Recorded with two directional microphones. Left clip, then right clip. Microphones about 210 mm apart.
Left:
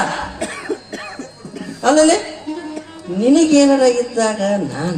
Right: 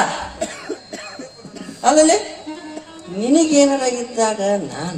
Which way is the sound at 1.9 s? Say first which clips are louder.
Left 1 dB; 60° right (ahead or behind).